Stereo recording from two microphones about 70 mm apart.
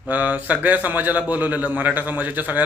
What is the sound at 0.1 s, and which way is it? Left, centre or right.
Speech, right.